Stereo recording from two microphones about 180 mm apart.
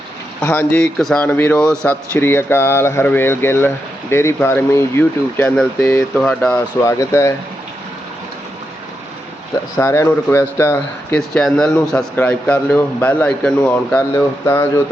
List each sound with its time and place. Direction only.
0.4 s a man's voice: 10° left (ahead or behind)
9.7 s a man's voice: 15° left (ahead or behind)
11.2 s a man's voice: centre (ahead or behind)